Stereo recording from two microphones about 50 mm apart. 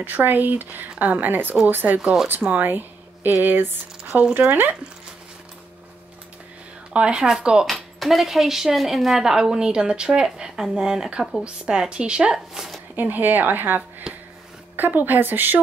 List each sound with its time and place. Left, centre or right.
0.0 s speech: right
4.3 s speech: right
6.9 s a woman's voice: centre
7.6 s a woman's voice: centre
12.9 s speech: right